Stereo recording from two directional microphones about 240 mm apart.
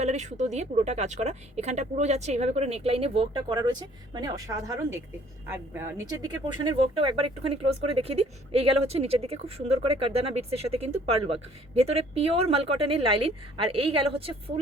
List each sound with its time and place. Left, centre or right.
0.0 s speech: right; by 6.1 s centre
6.5 s speech: right